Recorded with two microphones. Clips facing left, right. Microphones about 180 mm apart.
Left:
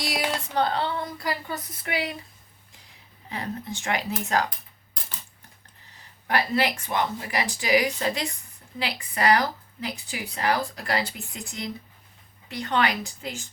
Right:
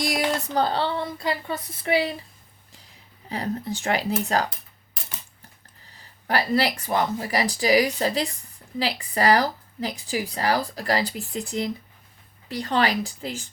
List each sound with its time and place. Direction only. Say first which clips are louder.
0.4 s speech: right 2 dB; 35° right (ahead or behind)
3.2 s speech: right 4 dB; 35° right (ahead or behind)
6.2 s speech: right 2 dB; 35° right (ahead or behind)